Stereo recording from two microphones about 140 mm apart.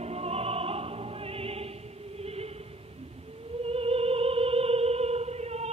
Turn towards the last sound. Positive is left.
turn(degrees=-50)  # may be behind; listen again after turning